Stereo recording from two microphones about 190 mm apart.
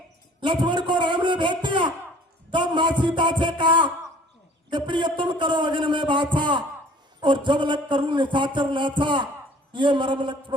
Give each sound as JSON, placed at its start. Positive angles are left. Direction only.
{"t": 0.4, "sound": "a man's voice", "side_deg": -25}